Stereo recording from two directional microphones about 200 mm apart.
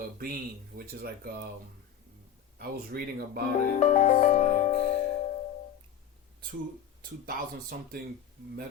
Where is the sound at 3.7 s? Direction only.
35° left (ahead or behind).